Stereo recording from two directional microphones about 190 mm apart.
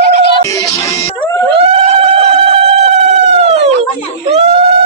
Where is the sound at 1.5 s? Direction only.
30° right (ahead or behind).